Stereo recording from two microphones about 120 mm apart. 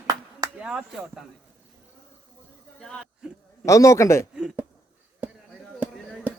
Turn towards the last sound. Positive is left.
turn(degrees=-10)  # may be behind; listen again after turning